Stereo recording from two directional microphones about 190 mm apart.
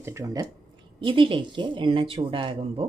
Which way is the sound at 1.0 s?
25° right (ahead or behind).